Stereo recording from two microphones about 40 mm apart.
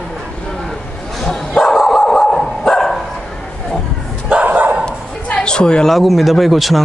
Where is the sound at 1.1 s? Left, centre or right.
Centre.